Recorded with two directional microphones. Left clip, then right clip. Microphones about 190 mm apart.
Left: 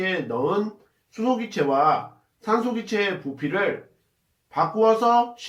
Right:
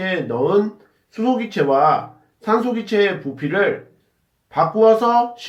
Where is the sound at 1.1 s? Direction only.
35° right (ahead or behind).